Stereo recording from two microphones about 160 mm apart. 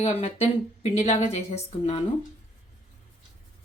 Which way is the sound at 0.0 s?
40° left (ahead or behind).